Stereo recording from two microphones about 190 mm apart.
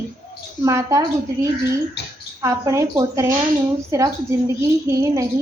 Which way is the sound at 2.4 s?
15° right (ahead or behind).